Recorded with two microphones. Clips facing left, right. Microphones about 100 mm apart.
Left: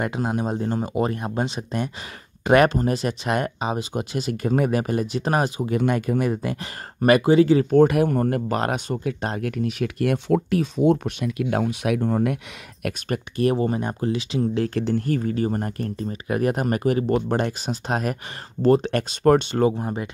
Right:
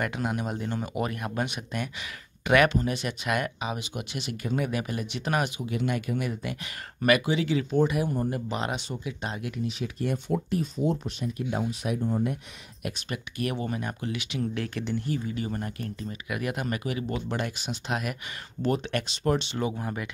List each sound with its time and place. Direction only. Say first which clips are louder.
0.0 s speech: left 5 dB; 30° left (ahead or behind)
7.7 s speech: left 8 dB; 60° left (ahead or behind)
8.4 s speech: left 7 dB; 50° left (ahead or behind); by 12.4 s 75° left (ahead or behind)
12.8 s speech: left 6 dB; 55° left (ahead or behind)
13.4 s speech: left 9 dB; 35° left (ahead or behind)
19.7 s speech: left 5 dB; 25° left (ahead or behind)